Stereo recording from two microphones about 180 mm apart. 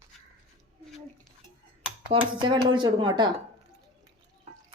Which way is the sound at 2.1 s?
25° right (ahead or behind).